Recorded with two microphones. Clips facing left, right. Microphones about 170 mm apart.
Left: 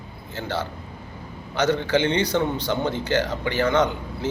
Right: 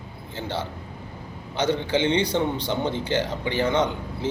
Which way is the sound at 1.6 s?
25° right (ahead or behind).